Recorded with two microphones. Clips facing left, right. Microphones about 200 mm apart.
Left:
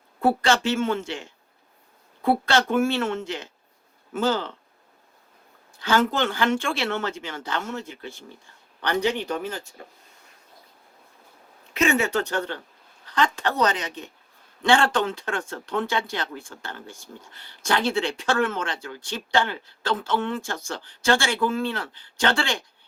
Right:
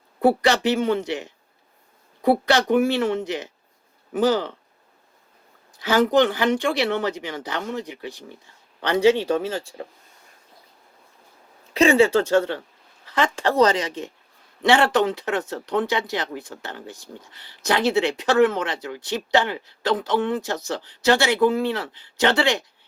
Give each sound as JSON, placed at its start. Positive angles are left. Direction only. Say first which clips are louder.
{"t": 0.8, "sound": "speech", "louder": "right 3 dB", "side_deg": -15}
{"t": 5.8, "sound": "speech", "louder": "right 5 dB", "side_deg": -20}
{"t": 11.7, "sound": "speech", "louder": "right 6 dB", "side_deg": -30}